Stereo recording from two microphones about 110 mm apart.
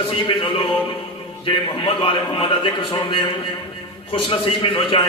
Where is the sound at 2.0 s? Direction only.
50° left (ahead or behind).